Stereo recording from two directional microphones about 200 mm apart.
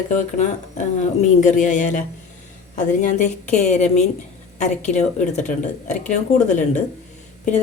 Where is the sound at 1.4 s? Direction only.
40° left (ahead or behind).